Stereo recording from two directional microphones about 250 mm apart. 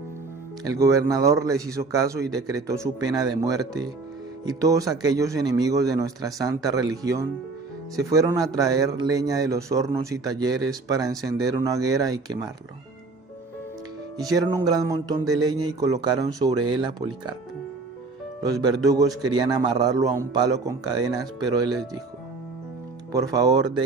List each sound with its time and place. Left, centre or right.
0.7 s a man's voice: centre
14.2 s a man's voice: centre
18.4 s a man's voice: centre
23.1 s a man's voice: centre